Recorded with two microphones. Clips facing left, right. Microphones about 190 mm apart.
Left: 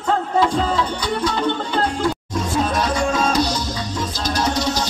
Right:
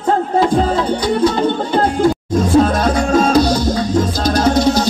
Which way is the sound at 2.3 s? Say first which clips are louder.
Right 9 dB; 55° right (ahead or behind).